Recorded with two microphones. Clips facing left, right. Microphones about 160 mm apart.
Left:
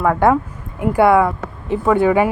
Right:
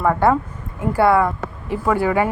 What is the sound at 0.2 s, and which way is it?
Speech, 15° left (ahead or behind).